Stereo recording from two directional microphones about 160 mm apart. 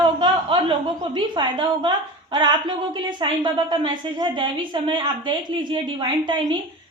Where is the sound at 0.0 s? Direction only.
30° right (ahead or behind).